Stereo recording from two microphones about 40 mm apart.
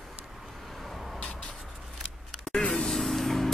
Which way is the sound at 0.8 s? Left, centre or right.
Centre.